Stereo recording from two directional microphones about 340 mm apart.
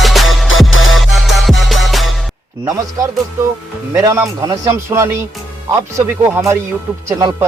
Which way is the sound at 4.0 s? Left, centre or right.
Centre.